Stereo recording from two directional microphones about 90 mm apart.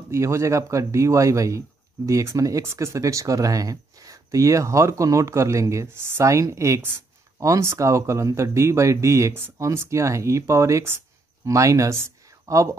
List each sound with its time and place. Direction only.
0.1 s speech: 30° right (ahead or behind)